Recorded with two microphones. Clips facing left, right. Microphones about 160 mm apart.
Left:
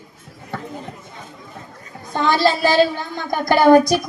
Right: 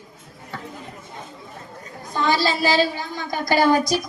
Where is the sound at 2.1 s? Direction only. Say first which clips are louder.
Left 4 dB; 55° left (ahead or behind).